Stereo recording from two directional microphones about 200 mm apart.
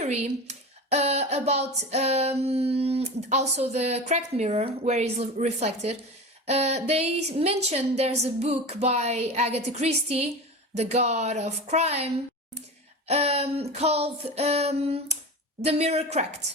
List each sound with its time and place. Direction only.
0.0 s speech: 35° right (ahead or behind)
13.1 s speech: 30° right (ahead or behind)